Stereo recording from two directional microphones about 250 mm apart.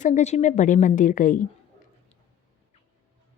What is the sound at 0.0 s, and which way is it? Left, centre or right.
A woman's voice, left.